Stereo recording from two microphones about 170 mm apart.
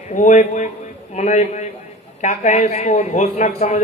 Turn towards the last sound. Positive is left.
turn(degrees=45)  # may be behind; listen again after turning